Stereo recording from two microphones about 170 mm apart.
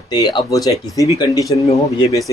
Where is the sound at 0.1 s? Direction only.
25° left (ahead or behind).